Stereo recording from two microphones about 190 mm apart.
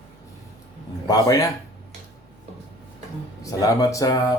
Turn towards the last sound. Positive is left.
turn(degrees=20)  # may be behind; listen again after turning